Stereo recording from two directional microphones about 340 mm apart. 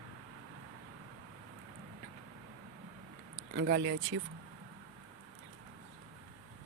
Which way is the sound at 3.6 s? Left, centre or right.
Right.